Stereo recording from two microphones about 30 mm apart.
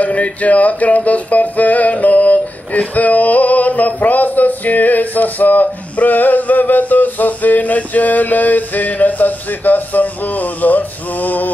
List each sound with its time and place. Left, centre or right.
0.0 s music: left
2.9 s male singing: left